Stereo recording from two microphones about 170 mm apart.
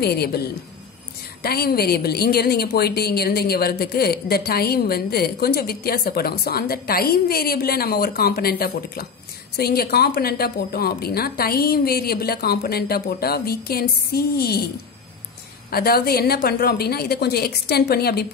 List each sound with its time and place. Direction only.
0.0 s a woman's voice: 70° left (ahead or behind)
15.7 s a woman's voice: 65° left (ahead or behind)